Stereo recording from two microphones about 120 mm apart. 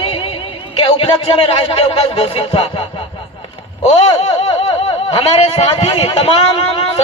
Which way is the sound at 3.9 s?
55° left (ahead or behind).